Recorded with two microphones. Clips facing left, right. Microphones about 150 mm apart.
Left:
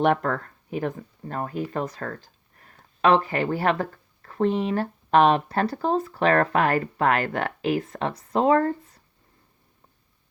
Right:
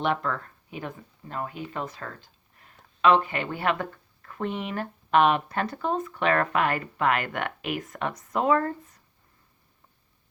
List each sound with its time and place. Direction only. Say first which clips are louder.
0.0 s speech: left 5 dB; 50° left (ahead or behind); by 9.0 s 35° left (ahead or behind)